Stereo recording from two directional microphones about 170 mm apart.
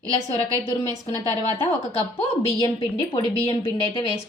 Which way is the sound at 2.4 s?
35° left (ahead or behind).